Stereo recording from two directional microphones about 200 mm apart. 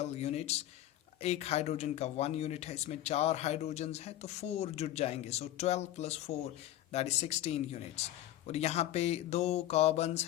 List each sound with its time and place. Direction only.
0.0 s speech: 35° left (ahead or behind)